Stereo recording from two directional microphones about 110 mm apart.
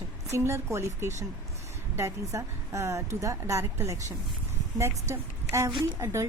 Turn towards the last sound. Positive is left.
turn(degrees=-30)  # may be behind; listen again after turning